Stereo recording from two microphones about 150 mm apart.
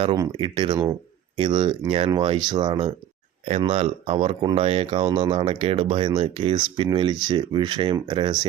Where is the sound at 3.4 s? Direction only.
40° right (ahead or behind).